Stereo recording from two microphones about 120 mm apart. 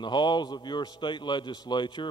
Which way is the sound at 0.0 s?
40° left (ahead or behind).